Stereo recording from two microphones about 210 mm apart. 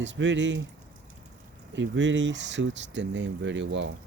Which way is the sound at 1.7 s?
60° right (ahead or behind).